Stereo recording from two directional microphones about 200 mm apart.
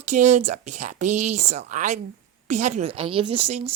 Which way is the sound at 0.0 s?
35° right (ahead or behind).